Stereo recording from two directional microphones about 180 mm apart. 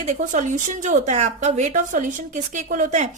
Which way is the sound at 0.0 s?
45° right (ahead or behind).